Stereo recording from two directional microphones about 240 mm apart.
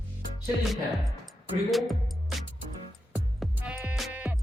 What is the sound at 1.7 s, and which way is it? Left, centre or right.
Music, centre.